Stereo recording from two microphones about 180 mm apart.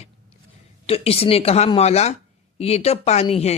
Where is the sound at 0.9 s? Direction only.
35° left (ahead or behind).